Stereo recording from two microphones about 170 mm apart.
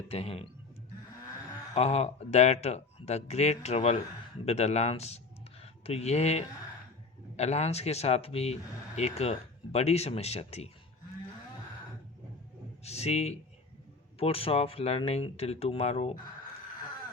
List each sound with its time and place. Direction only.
0.1 s speech: 35° left (ahead or behind)
1.7 s speech: 40° left (ahead or behind)
12.8 s speech: 40° left (ahead or behind)